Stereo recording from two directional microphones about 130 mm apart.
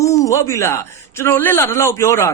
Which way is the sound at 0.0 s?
25° left (ahead or behind).